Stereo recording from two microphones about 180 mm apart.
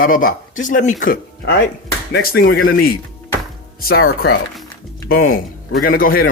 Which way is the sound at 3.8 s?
60° left (ahead or behind).